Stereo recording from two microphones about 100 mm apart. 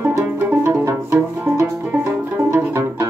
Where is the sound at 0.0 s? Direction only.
20° right (ahead or behind).